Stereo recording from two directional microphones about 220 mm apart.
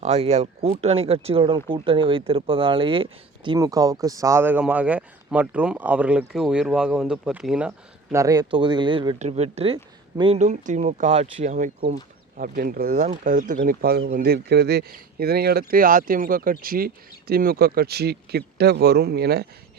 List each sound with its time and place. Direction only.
0.0 s speech: 30° right (ahead or behind); by 7.7 s 5° right (ahead or behind)
8.1 s speech: 15° right (ahead or behind); by 19.5 s 45° right (ahead or behind)